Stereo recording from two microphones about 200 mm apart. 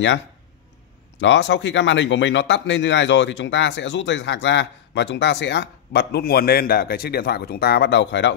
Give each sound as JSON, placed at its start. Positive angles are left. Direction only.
{"t": 1.2, "sound": "a man's voice", "side_deg": 60}